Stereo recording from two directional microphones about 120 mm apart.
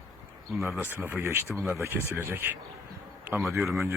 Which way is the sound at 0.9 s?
20° right (ahead or behind).